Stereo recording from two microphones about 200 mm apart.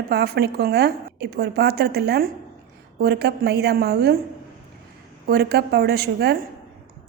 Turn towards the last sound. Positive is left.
turn(degrees=-55)  # may be behind; listen again after turning